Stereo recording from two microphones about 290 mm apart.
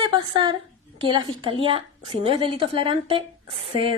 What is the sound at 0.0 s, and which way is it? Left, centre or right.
A woman's voice, centre.